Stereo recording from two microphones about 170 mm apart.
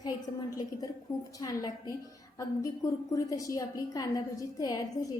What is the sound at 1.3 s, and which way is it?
A woman's voice, 20° left (ahead or behind).